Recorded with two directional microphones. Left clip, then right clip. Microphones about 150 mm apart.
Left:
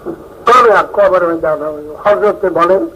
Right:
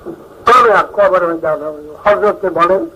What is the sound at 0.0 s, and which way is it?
A man's voice, 25° left (ahead or behind).